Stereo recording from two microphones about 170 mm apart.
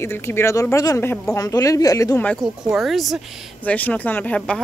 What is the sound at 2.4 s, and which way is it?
Speech, centre (ahead or behind).